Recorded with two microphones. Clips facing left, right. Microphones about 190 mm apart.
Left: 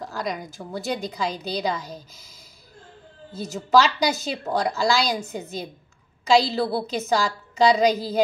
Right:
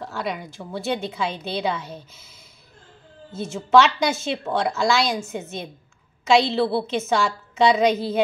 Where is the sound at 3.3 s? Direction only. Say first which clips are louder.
Right 2 dB; 35° left (ahead or behind).